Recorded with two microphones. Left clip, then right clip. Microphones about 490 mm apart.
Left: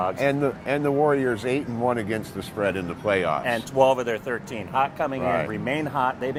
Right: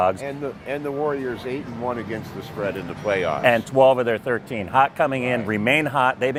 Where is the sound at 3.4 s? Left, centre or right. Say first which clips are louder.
Right 5 dB; right.